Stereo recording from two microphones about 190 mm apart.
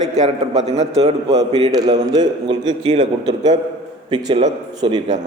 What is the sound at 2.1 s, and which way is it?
A man's voice, 20° right (ahead or behind).